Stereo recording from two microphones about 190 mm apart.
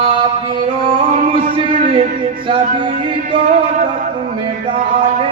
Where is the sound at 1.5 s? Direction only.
25° right (ahead or behind).